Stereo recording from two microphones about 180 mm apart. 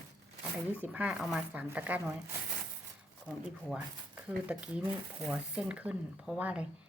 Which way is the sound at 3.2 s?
5° right (ahead or behind).